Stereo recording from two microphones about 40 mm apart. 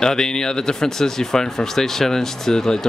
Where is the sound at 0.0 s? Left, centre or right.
Centre.